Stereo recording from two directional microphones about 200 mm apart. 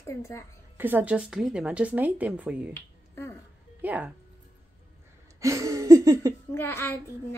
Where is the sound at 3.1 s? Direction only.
10° left (ahead or behind).